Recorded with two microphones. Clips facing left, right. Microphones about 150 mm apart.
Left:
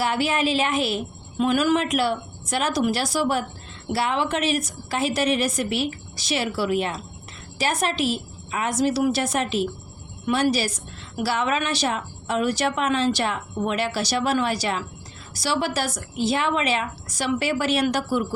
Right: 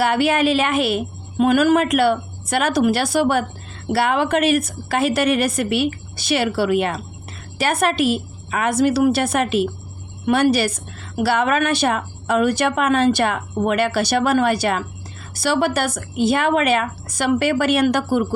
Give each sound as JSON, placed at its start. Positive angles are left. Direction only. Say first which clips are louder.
{"t": 0.0, "sound": "a woman's voice", "louder": "right 6 dB", "side_deg": -65}
{"t": 1.4, "sound": "a woman's voice", "louder": "right 5 dB", "side_deg": -50}